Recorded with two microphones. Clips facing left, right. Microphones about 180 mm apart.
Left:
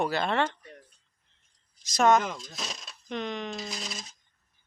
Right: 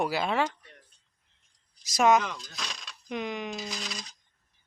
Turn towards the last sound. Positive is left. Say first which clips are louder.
# even
turn(degrees=0)  # may be behind; listen again after turning